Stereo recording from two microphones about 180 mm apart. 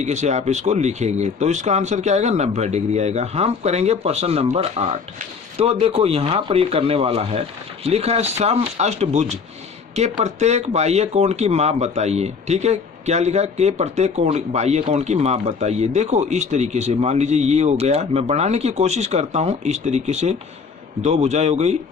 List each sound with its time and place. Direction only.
0.0 s speech: 40° right (ahead or behind)